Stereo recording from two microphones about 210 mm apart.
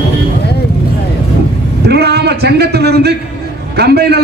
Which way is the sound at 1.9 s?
50° right (ahead or behind).